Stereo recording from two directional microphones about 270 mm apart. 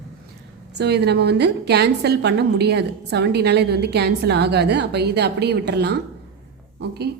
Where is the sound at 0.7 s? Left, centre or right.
Right.